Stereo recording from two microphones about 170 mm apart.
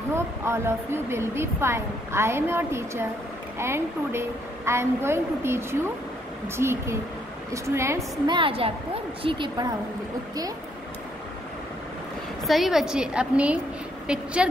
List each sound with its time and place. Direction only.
0.1 s a woman's voice: 15° right (ahead or behind)
8.3 s a woman's voice: 30° right (ahead or behind)
12.4 s a woman's voice: centre (ahead or behind)